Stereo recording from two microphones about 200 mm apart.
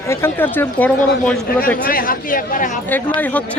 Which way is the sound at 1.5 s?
45° left (ahead or behind).